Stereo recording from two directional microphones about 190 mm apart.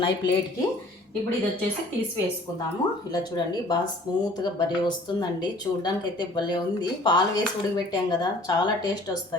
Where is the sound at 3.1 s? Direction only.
20° left (ahead or behind).